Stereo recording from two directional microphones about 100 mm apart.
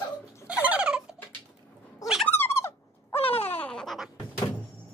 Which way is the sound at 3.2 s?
75° left (ahead or behind).